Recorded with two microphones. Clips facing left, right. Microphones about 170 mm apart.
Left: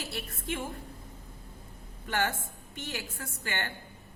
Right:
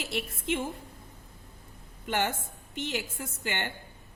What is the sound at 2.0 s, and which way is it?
A woman's voice, 20° right (ahead or behind).